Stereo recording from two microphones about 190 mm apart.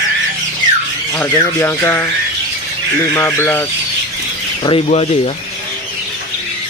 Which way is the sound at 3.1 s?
10° left (ahead or behind).